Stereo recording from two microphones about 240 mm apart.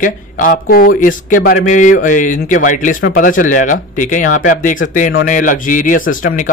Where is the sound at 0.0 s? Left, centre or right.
Left.